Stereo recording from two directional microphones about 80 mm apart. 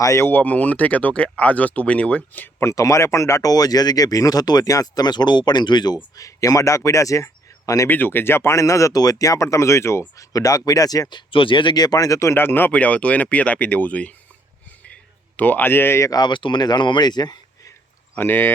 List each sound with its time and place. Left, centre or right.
0.0 s speech: left
0.3 s speech: centre
2.6 s speech: left
6.1 s speech: left
7.9 s speech: left
10.3 s speech: left
11.1 s speech: left; by 14.2 s centre
15.4 s speech: left
16.0 s speech: left
18.2 s speech: left